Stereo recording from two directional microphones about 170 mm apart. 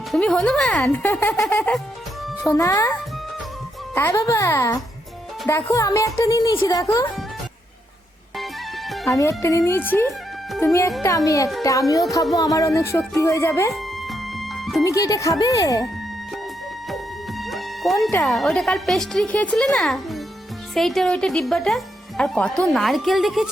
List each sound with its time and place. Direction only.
0.1 s speech: centre (ahead or behind); by 2.9 s 20° left (ahead or behind)
3.9 s speech: 15° left (ahead or behind)
9.0 s speech: 15° left (ahead or behind)
14.1 s music: centre (ahead or behind)
14.8 s speech: 20° left (ahead or behind)
18.3 s speech: centre (ahead or behind)